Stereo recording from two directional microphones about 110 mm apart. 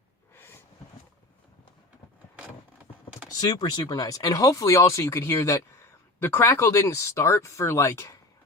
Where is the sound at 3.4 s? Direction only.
40° left (ahead or behind).